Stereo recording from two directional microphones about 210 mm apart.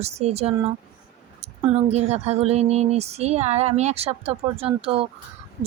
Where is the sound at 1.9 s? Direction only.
30° right (ahead or behind).